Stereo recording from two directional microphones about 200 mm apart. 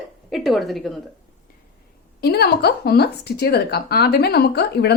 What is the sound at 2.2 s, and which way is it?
Speech, 50° left (ahead or behind).